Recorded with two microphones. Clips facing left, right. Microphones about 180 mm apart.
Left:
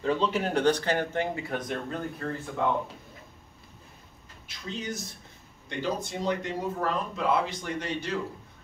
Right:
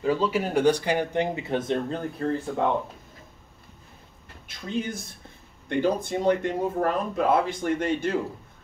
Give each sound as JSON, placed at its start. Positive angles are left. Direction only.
{"t": 0.0, "sound": "speech", "side_deg": -5}
{"t": 4.5, "sound": "speech", "side_deg": -55}